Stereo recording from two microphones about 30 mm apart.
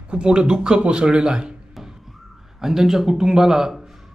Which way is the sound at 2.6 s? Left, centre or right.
Centre.